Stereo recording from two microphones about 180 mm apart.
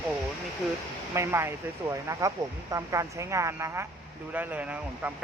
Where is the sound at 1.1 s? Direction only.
15° right (ahead or behind).